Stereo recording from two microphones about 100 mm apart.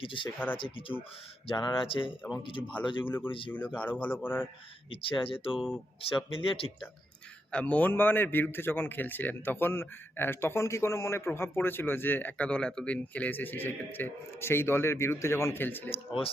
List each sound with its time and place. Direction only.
0.0 s speech: 60° left (ahead or behind)
1.5 s speech: 45° left (ahead or behind)
1.9 s speech: 60° left (ahead or behind)
3.1 s a man's voice: 20° left (ahead or behind)
4.9 s speech: 65° left (ahead or behind)
5.5 s speech: 5° right (ahead or behind)
6.0 s speech: 65° left (ahead or behind)
7.5 s a man's voice: 15° left (ahead or behind)
15.9 s speech: 70° left (ahead or behind)